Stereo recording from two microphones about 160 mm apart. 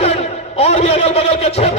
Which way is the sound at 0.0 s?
40° left (ahead or behind).